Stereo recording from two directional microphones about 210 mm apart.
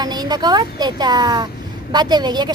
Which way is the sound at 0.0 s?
20° right (ahead or behind).